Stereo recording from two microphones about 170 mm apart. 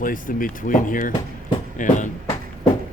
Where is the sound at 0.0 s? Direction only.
55° left (ahead or behind).